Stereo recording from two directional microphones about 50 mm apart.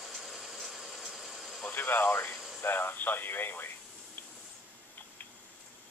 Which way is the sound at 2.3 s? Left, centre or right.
Centre.